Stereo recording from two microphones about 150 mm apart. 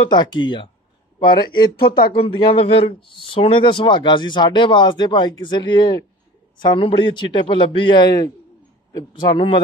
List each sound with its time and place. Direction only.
0.1 s a man's voice: 30° left (ahead or behind)